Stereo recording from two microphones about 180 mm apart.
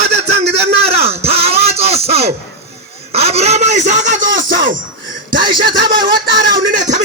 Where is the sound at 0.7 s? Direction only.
35° right (ahead or behind).